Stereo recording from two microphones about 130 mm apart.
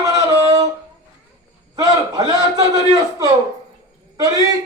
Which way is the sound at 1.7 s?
30° right (ahead or behind).